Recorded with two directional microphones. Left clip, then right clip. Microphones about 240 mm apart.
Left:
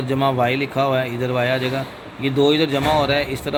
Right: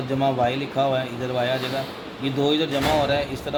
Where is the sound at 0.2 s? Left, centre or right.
Left.